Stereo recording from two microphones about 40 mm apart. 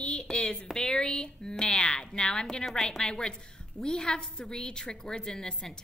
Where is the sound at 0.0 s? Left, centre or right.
Left.